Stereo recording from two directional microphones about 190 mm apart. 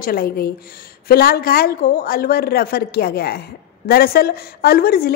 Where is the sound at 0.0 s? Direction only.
55° left (ahead or behind).